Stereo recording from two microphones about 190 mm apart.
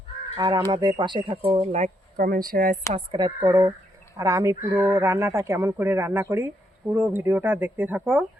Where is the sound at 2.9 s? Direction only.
25° right (ahead or behind); by 8.2 s 10° right (ahead or behind).